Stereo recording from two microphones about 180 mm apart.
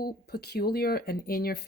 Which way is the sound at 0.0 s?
60° left (ahead or behind).